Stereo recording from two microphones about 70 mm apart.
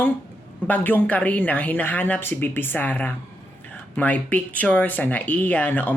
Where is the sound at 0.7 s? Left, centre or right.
Left.